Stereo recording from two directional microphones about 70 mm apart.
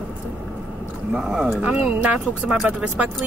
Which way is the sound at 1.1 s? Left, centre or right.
Centre.